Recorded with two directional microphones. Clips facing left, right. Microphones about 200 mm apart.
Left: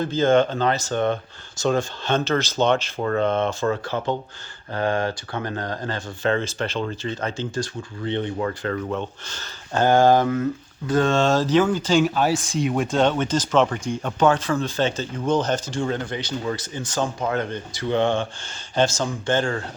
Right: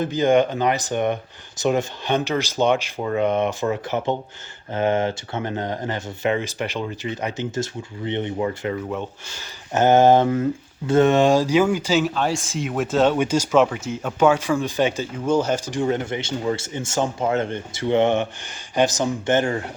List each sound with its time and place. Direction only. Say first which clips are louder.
0.0 s speech: right 1 dB; 15° right (ahead or behind)